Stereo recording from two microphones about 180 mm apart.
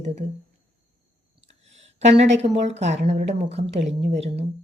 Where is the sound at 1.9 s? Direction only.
40° right (ahead or behind).